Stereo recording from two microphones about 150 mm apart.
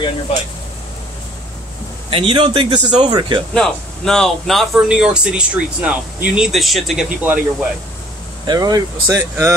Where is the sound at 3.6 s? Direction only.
5° left (ahead or behind).